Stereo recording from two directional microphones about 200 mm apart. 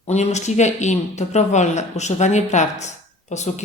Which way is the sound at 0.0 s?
35° left (ahead or behind).